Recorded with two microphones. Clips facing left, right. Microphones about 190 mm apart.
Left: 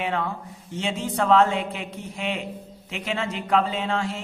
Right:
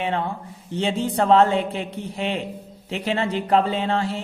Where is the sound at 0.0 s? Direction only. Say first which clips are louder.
Right 2 dB; 30° right (ahead or behind).